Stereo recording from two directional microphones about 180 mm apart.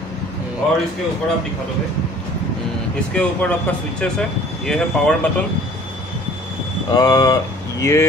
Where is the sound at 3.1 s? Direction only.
5° left (ahead or behind).